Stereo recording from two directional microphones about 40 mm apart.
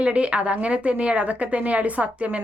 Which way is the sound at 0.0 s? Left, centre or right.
Right.